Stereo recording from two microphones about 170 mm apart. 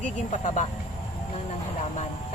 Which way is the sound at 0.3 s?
45° left (ahead or behind).